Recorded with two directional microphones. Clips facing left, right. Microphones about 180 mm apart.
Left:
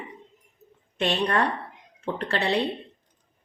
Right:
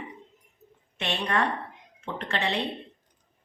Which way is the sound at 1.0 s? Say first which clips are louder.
Left 4 dB; 35° left (ahead or behind).